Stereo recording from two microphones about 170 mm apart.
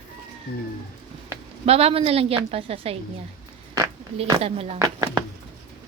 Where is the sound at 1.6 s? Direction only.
35° right (ahead or behind).